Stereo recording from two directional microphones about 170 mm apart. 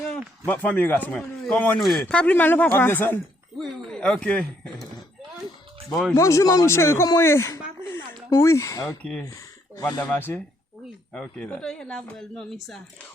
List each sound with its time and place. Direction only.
0.4 s speech: 10° left (ahead or behind)
5.9 s speech: 5° left (ahead or behind)
6.1 s speech: 20° left (ahead or behind)
9.0 s speech: 5° left (ahead or behind)
9.2 s speech: 20° left (ahead or behind)
10.1 s speech: 10° left (ahead or behind)